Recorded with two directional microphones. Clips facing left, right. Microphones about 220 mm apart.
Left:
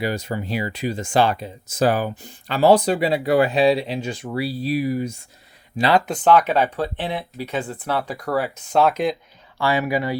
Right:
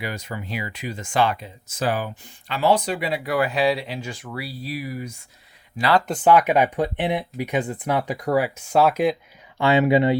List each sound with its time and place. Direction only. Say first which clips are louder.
0.0 s speech: left 6 dB; 30° left (ahead or behind)
6.1 s speech: even; 10° right (ahead or behind)
9.6 s speech: right 4 dB; 25° right (ahead or behind)